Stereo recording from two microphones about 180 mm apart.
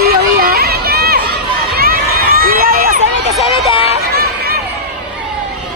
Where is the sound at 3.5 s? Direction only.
30° left (ahead or behind).